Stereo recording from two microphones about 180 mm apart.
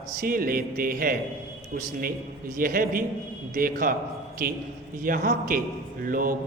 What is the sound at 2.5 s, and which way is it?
Speech, 50° right (ahead or behind).